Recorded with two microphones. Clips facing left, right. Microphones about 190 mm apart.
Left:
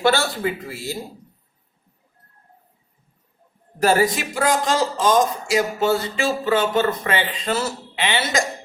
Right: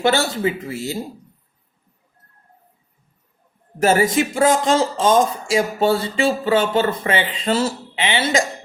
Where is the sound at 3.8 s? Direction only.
20° right (ahead or behind).